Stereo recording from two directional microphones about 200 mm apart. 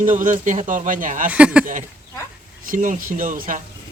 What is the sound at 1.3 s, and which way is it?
Speech, 5° right (ahead or behind).